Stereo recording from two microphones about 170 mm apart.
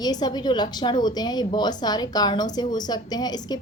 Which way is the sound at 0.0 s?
25° left (ahead or behind).